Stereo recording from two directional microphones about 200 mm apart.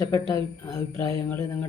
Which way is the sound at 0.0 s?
15° left (ahead or behind).